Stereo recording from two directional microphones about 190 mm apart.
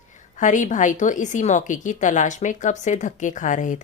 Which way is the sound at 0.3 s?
40° left (ahead or behind).